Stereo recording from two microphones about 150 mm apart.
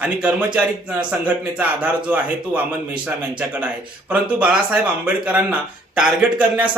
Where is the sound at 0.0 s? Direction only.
10° right (ahead or behind).